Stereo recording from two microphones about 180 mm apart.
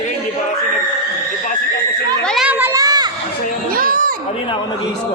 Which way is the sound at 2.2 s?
5° right (ahead or behind).